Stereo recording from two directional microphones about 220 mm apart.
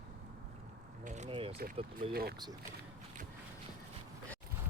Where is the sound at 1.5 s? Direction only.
45° right (ahead or behind).